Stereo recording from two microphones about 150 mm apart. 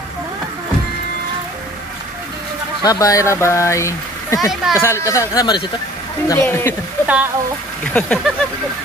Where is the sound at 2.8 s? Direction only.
20° left (ahead or behind).